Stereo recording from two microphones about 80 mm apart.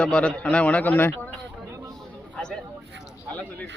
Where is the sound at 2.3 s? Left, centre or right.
Centre.